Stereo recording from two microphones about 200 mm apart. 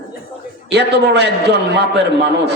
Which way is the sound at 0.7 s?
60° right (ahead or behind).